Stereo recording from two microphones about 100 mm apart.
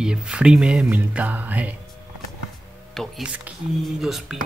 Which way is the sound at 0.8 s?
20° right (ahead or behind).